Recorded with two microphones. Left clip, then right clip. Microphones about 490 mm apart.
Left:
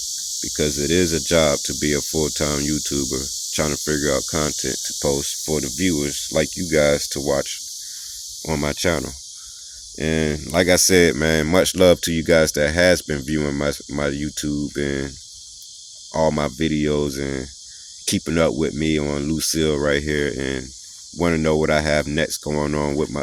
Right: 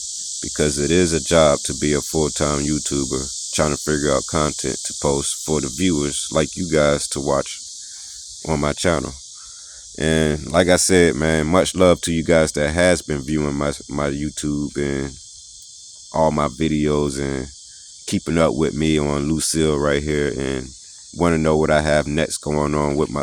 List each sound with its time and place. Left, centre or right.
0.3 s speech: left
16.1 s speech: left